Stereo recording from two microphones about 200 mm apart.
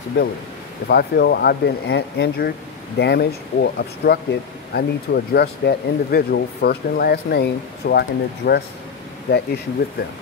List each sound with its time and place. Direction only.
0.2 s speech: 60° left (ahead or behind)